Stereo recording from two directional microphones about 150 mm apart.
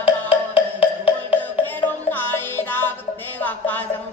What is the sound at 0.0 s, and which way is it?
Music, 35° left (ahead or behind).